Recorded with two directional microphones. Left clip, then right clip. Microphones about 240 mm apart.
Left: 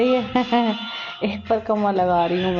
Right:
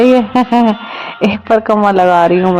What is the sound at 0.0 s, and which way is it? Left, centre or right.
A man's voice, right.